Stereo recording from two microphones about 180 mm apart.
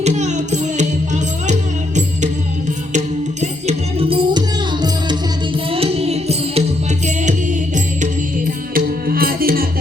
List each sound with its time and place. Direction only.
0.0 s music: 40° right (ahead or behind)
3.4 s music: 35° right (ahead or behind)
8.7 s music: 55° right (ahead or behind)